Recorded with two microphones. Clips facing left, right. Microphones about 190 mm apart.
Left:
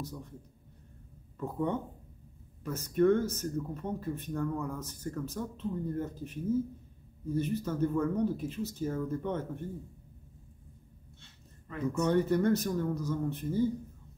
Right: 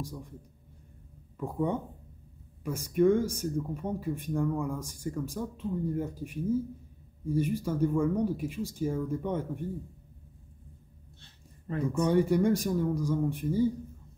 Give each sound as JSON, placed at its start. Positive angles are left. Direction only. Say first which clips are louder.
{"t": 0.0, "sound": "speech", "louder": "right 2 dB", "side_deg": -10}
{"t": 1.4, "sound": "speech", "louder": "right 2 dB", "side_deg": -10}
{"t": 11.1, "sound": "a sound", "louder": "even", "side_deg": -35}
{"t": 12.0, "sound": "speech", "louder": "right 2 dB", "side_deg": -10}